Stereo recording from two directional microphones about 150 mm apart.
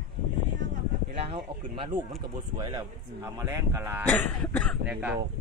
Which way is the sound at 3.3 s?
15° right (ahead or behind).